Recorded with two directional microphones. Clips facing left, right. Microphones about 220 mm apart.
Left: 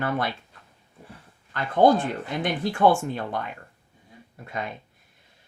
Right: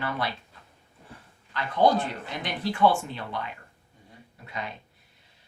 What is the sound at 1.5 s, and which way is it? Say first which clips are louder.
A woman's voice: left 4 dB; 50° left (ahead or behind).